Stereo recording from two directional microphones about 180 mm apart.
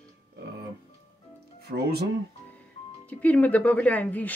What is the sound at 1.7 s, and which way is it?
Speech, 60° right (ahead or behind).